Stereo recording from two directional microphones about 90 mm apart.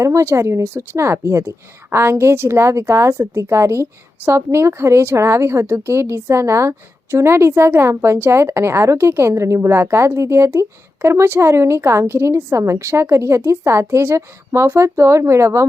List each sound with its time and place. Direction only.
0.0 s speech: 35° right (ahead or behind)